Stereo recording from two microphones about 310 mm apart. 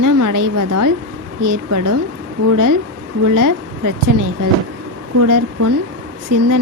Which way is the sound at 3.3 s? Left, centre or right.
Right.